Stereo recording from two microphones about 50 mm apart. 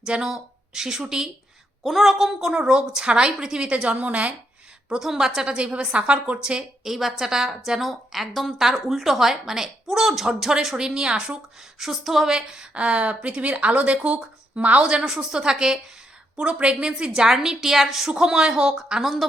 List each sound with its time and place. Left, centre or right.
0.0 s speech: centre
1.8 s a woman's voice: centre
2.5 s speech: centre
4.9 s a woman's voice: centre
6.8 s a woman's voice: centre
11.8 s a woman's voice: centre
16.4 s a woman's voice: right